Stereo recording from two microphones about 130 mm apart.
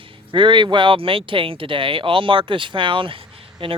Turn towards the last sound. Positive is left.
turn(degrees=-45)  # may be behind; listen again after turning